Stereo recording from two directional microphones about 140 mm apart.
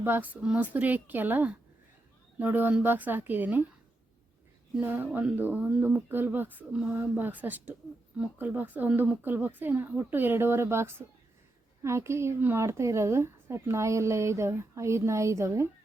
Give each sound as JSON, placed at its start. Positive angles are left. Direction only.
{"t": 0.0, "sound": "speech", "side_deg": -15}
{"t": 4.7, "sound": "speech", "side_deg": -15}